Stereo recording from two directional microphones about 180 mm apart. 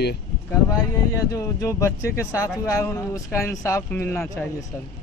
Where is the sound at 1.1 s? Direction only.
20° left (ahead or behind).